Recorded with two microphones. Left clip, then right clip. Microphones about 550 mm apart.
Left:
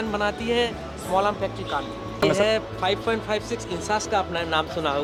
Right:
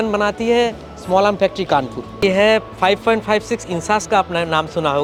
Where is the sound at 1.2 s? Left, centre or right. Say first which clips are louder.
Right 9 dB; right.